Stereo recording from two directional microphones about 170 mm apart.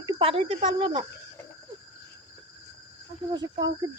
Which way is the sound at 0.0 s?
35° right (ahead or behind).